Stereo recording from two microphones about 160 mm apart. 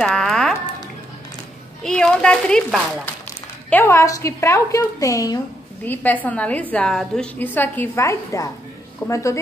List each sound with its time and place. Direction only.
0.0 s a sound: 5° left (ahead or behind)
1.8 s speech: 5° left (ahead or behind)
3.7 s a woman's voice: 15° left (ahead or behind)